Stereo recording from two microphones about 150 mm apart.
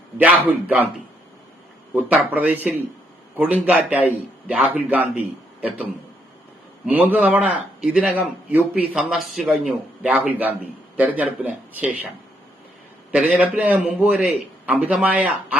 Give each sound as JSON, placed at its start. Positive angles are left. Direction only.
{"t": 0.2, "sound": "a man's voice", "side_deg": -10}
{"t": 1.9, "sound": "a man's voice", "side_deg": -10}